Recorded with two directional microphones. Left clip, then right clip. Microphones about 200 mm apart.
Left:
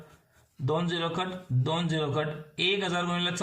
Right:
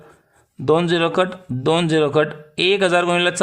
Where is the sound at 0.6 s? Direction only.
50° right (ahead or behind).